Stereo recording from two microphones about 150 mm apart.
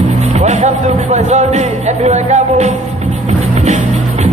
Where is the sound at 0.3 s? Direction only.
50° right (ahead or behind).